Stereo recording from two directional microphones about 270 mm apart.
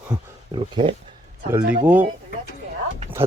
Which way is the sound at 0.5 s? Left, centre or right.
Centre.